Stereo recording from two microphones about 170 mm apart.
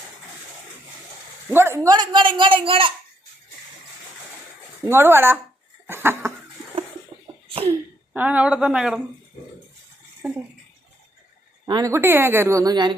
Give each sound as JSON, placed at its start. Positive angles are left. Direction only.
{"t": 1.5, "sound": "speech", "side_deg": -15}
{"t": 4.8, "sound": "a woman's voice", "side_deg": -15}
{"t": 5.9, "sound": "laughter", "side_deg": -15}
{"t": 7.4, "sound": "cough", "side_deg": -30}
{"t": 7.7, "sound": "speech", "side_deg": -10}
{"t": 10.2, "sound": "a woman's voice", "side_deg": -5}
{"t": 11.6, "sound": "a woman's voice", "side_deg": -20}